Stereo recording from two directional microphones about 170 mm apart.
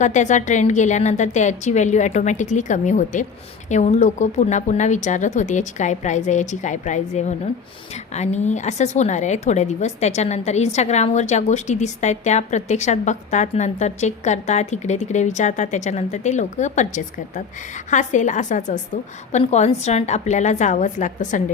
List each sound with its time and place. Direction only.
0.0 s a woman's voice: 45° left (ahead or behind)